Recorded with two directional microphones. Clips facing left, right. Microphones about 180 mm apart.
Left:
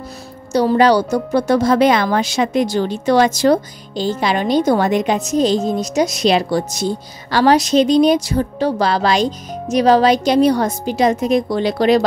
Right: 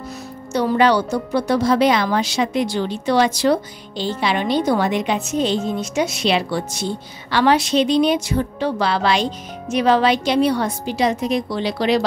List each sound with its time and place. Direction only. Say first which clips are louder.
0.5 s a woman's voice: left 4 dB; 35° left (ahead or behind)